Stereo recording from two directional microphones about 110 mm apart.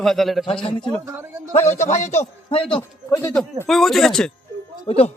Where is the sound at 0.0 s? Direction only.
Centre (ahead or behind).